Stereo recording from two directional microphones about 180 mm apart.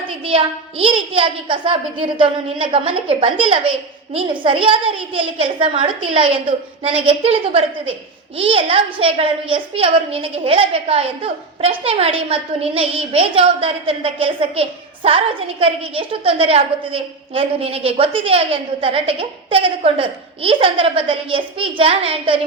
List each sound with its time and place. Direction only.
0.3 s a child's voice: 30° right (ahead or behind)